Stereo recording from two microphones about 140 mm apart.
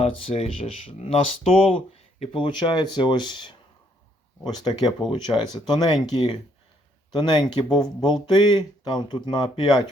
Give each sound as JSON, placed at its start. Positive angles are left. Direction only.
{"t": 0.0, "sound": "speech", "side_deg": 40}